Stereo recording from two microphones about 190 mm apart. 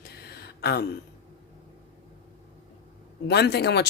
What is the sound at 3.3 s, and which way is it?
Speech, 60° left (ahead or behind).